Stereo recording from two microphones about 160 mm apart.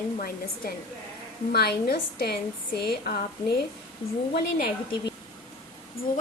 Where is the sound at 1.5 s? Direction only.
75° left (ahead or behind).